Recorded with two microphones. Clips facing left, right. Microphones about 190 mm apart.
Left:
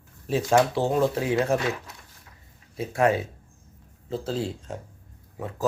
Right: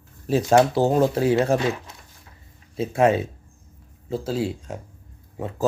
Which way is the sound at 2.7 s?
25° right (ahead or behind).